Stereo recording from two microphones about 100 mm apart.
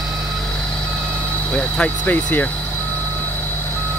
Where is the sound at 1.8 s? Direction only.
15° left (ahead or behind).